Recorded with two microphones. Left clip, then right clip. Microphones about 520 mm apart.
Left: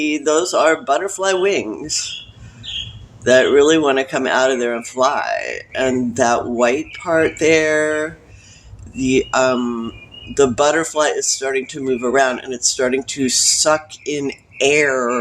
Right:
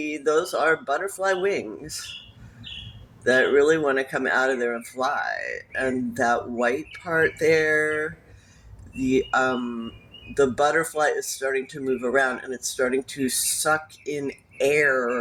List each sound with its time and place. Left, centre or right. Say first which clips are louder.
0.3 s speech: left 7 dB; right
3.3 s speech: left 7 dB; right